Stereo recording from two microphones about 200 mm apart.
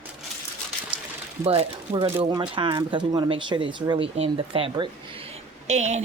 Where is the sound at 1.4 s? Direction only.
30° right (ahead or behind).